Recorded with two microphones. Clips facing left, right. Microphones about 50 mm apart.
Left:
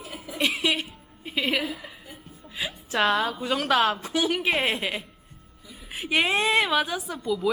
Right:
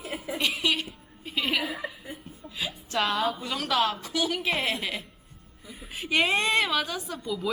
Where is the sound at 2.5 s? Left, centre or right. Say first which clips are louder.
Left 3 dB; left.